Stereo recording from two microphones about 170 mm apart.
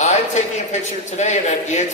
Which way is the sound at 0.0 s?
45° left (ahead or behind).